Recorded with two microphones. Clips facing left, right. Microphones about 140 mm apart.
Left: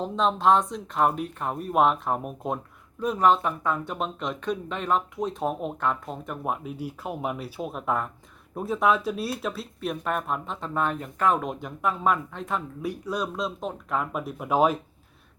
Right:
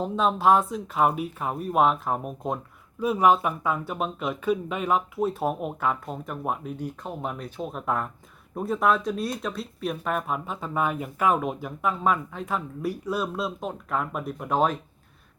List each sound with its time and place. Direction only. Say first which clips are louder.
0.0 s speech: right 1 dB; 5° right (ahead or behind)